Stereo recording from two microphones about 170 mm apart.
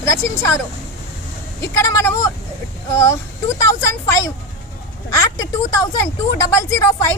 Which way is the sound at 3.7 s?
15° left (ahead or behind).